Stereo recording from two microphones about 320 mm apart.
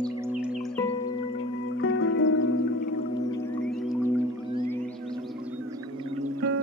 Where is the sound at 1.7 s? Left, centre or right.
Left.